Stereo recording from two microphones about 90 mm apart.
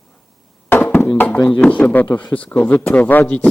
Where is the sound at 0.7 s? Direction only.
20° left (ahead or behind).